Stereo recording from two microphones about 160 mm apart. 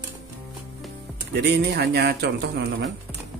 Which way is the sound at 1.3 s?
90° right.